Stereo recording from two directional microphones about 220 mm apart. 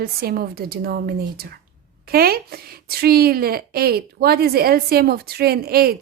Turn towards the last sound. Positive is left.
turn(degrees=-45)  # may be behind; listen again after turning